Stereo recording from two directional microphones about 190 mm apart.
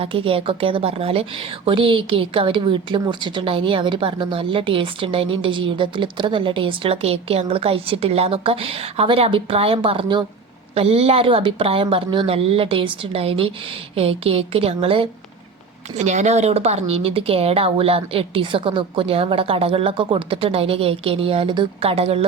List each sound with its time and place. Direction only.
0.0 s speech: 30° right (ahead or behind)